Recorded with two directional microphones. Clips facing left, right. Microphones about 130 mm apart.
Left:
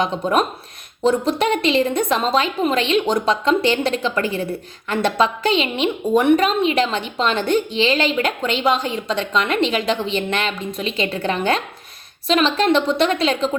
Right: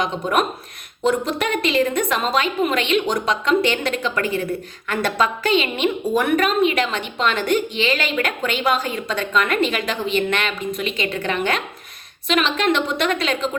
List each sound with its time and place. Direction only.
1.0 s a woman's voice: 30° left (ahead or behind)